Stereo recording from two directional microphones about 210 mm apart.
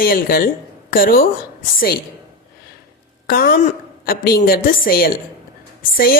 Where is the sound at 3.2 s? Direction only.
45° left (ahead or behind).